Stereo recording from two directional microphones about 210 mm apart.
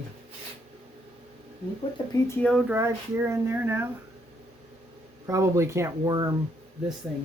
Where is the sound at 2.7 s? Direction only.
10° right (ahead or behind).